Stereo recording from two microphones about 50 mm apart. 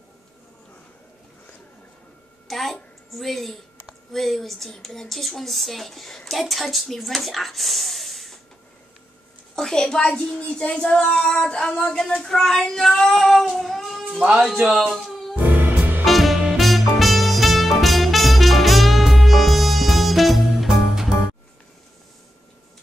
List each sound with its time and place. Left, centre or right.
2.4 s a woman's voice: centre
9.6 s a child's voice: centre
13.6 s child singing: centre
14.2 s speech: centre
14.7 s speech: centre
15.3 s music: right
16.1 s swing music: centre
16.5 s music: centre